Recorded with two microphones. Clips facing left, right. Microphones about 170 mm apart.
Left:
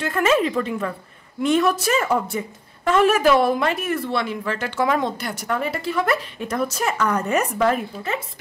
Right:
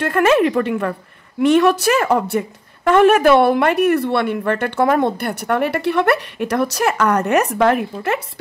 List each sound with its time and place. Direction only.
0.0 s a woman's voice: 60° right (ahead or behind)
1.4 s a woman's voice: 70° right (ahead or behind)